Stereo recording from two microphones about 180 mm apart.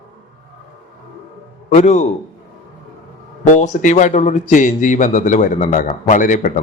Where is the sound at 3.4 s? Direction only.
40° left (ahead or behind).